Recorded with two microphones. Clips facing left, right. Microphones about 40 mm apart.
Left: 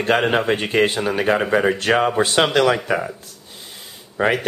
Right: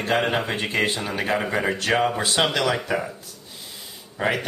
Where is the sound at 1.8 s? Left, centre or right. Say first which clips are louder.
Left 4 dB; left.